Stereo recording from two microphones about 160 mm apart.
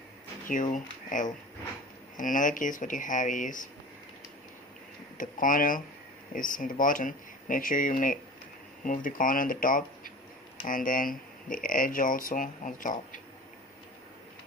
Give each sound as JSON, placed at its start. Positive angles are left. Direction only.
{"t": 0.4, "sound": "speech", "side_deg": 55}
{"t": 5.1, "sound": "speech", "side_deg": 55}